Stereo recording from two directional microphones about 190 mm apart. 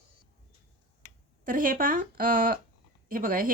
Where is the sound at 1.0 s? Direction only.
45° right (ahead or behind).